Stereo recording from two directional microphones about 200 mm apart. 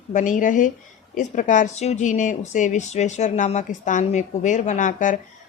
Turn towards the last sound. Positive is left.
turn(degrees=40)  # may be behind; listen again after turning